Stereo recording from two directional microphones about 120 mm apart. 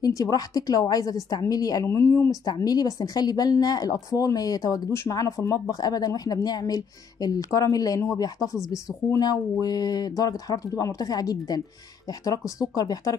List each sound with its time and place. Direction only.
0.0 s speech: 30° left (ahead or behind)